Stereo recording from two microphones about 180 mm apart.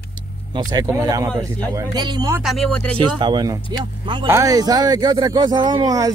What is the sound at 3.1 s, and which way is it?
Speech, 25° right (ahead or behind).